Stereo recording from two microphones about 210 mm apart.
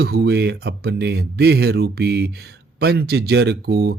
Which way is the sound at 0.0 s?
50° right (ahead or behind).